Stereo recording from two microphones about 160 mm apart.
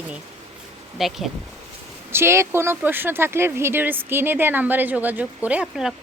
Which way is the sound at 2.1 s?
15° right (ahead or behind).